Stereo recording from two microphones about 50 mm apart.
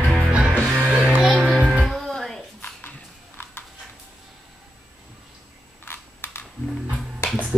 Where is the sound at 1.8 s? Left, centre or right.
Centre.